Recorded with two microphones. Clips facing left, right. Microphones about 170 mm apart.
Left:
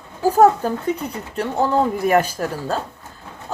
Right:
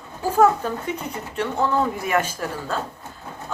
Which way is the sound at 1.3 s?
35° left (ahead or behind).